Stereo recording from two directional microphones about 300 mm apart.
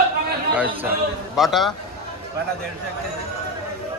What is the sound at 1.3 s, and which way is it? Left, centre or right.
Speech, centre.